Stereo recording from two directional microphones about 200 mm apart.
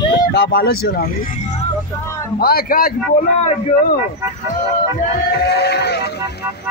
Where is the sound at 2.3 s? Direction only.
50° left (ahead or behind).